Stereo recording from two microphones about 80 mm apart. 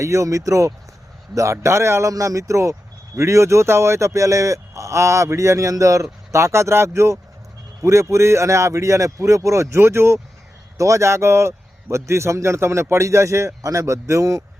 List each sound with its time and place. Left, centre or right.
0.0 s speech: right